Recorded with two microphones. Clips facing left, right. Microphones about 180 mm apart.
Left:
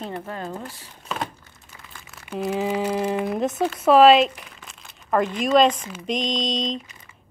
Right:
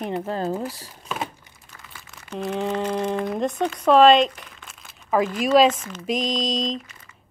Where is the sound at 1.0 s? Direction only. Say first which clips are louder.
Even; 5° right (ahead or behind).